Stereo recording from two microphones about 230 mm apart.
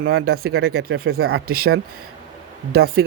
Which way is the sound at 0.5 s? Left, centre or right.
Right.